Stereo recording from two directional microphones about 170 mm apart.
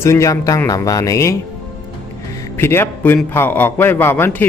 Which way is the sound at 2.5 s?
15° left (ahead or behind).